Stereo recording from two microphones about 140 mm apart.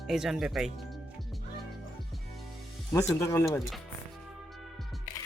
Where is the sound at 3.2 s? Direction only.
20° left (ahead or behind).